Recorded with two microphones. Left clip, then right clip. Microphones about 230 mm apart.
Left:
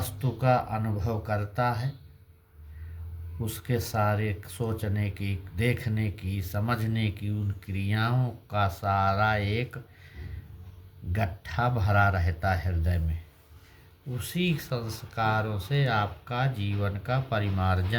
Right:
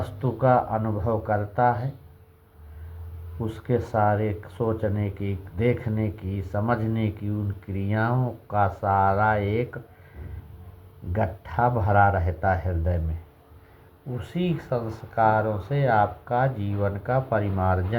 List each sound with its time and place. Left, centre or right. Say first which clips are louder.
0.0 s speech: right 6 dB; left
3.4 s speech: right 6 dB; left
11.1 s speech: right 5 dB; left
14.2 s speech: right 1 dB; left